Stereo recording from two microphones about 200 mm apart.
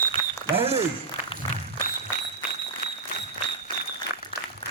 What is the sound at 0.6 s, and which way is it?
Speech, 30° right (ahead or behind).